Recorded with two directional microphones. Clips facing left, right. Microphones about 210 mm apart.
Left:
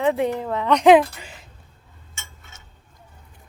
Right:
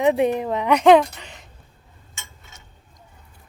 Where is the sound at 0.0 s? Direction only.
20° right (ahead or behind).